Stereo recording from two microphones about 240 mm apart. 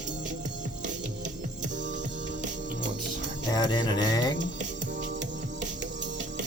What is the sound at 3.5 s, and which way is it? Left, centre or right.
Speech, centre.